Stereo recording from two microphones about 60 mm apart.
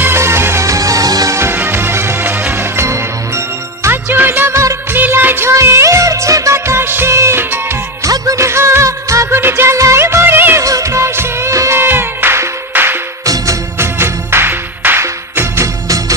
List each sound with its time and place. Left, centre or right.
0.0 s music: right
0.7 s music: right
1.5 s music: right
4.5 s music of bollywood: right
4.9 s music: right
8.0 s music: right
8.5 s music: right
9.4 s music: right
10.6 s music: right
11.7 s music: right
13.2 s music: right
13.7 s music: right
15.0 s music: right